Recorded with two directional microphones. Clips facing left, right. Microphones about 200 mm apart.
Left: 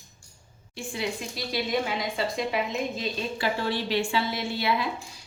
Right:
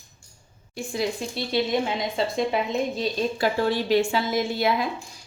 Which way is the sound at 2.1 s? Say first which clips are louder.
Right 5 dB; 30° right (ahead or behind).